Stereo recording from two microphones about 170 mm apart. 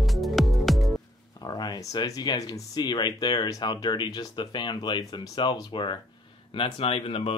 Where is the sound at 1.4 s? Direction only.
25° left (ahead or behind).